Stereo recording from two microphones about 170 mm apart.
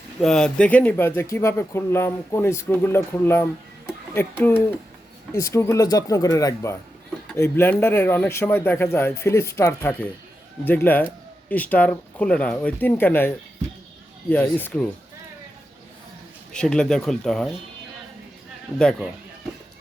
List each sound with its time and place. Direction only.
0.2 s speech: 5° left (ahead or behind)
16.5 s speech: 5° left (ahead or behind)
18.8 s speech: 5° left (ahead or behind)